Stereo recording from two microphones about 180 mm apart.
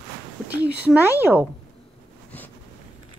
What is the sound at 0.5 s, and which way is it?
A woman's voice, 10° right (ahead or behind).